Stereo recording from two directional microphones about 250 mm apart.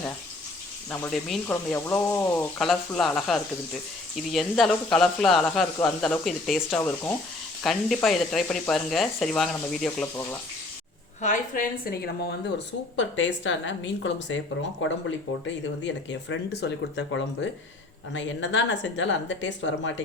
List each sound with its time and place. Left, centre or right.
0.9 s speech: centre
11.2 s a woman's voice: left
13.0 s speech: left